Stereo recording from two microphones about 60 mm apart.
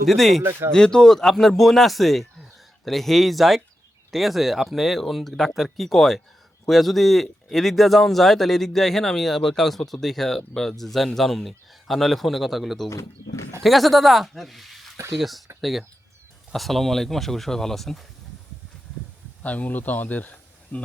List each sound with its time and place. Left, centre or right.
0.0 s speech: centre
0.7 s speech: centre
12.9 s speech: left
13.6 s speech: centre
19.4 s a man's voice: left